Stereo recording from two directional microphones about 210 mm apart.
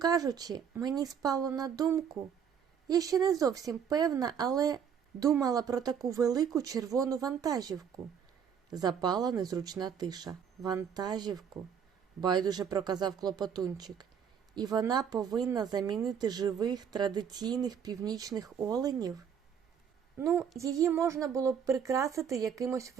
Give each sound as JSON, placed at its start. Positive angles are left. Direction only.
{"t": 0.0, "sound": "speech", "side_deg": -15}